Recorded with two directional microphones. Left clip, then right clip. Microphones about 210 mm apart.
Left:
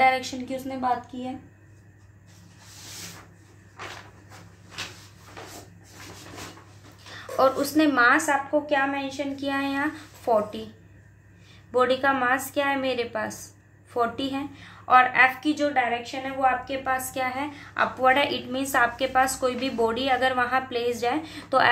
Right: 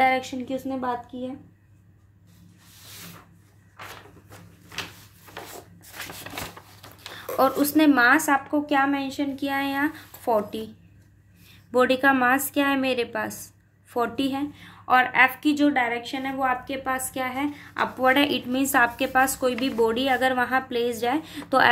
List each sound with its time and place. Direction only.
0.0 s a woman's voice: 35° right (ahead or behind)
7.2 s a woman's voice: 40° right (ahead or behind)
11.7 s a woman's voice: 45° right (ahead or behind)